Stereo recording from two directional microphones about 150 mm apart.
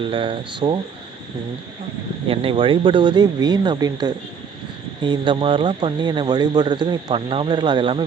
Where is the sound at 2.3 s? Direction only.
35° right (ahead or behind).